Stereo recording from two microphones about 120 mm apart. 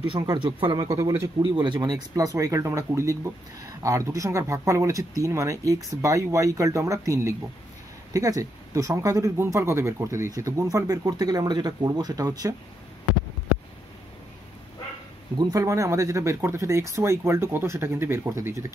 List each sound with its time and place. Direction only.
0.7 s speech: 30° right (ahead or behind)
1.4 s speech: 40° right (ahead or behind)
15.3 s speech: 30° right (ahead or behind)